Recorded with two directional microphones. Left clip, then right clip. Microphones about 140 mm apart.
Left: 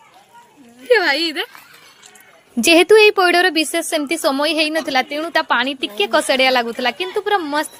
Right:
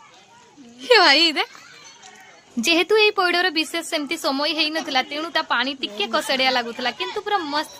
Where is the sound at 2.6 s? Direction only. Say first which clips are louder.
Left 7 dB; 40° left (ahead or behind).